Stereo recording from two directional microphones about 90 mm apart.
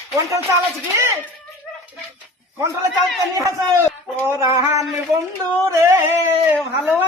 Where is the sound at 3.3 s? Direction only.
35° right (ahead or behind).